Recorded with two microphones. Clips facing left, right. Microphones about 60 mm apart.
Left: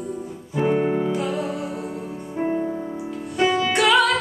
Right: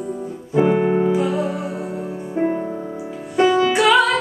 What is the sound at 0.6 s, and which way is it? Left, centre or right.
Music, centre.